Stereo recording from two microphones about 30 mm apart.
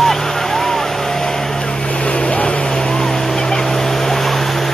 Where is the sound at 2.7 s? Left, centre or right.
Centre.